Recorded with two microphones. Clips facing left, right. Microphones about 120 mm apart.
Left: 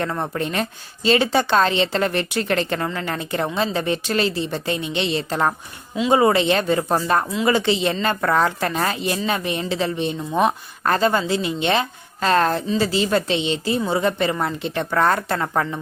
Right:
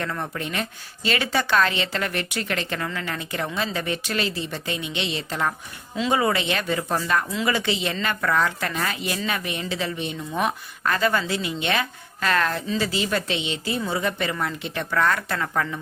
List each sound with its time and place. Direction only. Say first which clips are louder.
0.0 s a woman's voice: left 5 dB; 30° left (ahead or behind)